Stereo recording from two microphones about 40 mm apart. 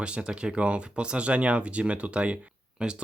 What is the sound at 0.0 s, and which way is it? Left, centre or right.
Speech, right.